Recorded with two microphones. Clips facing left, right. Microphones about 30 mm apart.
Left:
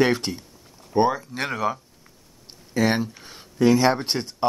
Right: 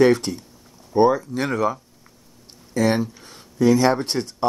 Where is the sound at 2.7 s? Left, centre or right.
Centre.